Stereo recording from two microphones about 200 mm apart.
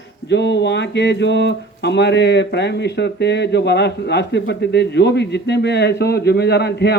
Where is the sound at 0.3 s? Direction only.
60° left (ahead or behind).